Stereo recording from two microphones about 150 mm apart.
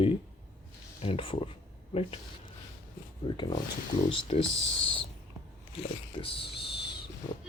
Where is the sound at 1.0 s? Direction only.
35° left (ahead or behind).